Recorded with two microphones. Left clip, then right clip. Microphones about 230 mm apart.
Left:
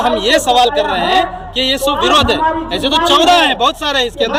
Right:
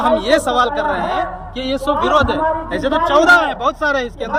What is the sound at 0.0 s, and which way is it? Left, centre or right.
A man's voice, centre.